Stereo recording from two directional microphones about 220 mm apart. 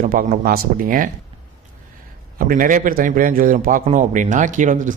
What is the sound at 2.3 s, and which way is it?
A man's voice, 40° right (ahead or behind).